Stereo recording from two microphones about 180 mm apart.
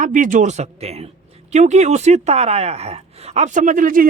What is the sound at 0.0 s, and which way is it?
Speech, 45° right (ahead or behind).